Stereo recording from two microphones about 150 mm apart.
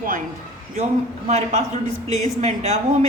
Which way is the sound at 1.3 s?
50° right (ahead or behind).